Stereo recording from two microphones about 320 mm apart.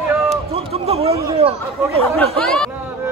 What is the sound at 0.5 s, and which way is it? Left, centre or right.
Speech, centre.